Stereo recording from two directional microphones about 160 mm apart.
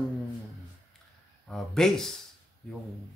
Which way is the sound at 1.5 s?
Centre (ahead or behind).